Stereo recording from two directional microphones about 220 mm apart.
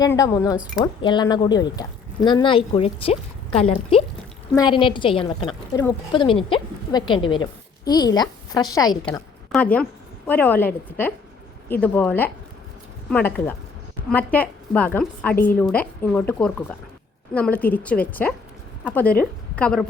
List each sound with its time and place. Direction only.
0.0 s a woman's voice: 15° left (ahead or behind)
0.5 s speech: 5° right (ahead or behind)
1.0 s a woman's voice: 20° left (ahead or behind)
9.5 s a woman's voice: 5° left (ahead or behind)